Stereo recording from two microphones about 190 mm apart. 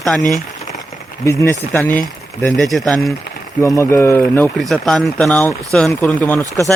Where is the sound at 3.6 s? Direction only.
15° left (ahead or behind).